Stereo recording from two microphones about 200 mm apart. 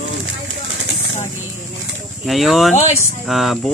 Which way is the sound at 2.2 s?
Centre (ahead or behind).